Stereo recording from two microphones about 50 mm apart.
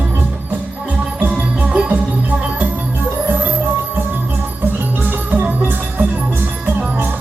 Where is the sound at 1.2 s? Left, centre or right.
Right.